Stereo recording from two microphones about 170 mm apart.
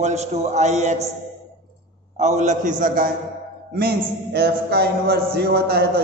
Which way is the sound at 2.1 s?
45° right (ahead or behind).